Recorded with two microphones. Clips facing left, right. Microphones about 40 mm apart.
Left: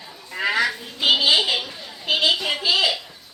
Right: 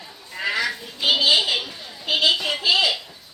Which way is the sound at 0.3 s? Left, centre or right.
Left.